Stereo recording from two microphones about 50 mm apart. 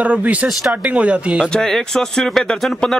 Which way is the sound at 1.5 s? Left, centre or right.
Centre.